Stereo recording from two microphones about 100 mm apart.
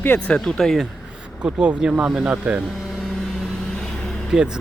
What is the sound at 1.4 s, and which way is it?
Speech, 10° right (ahead or behind).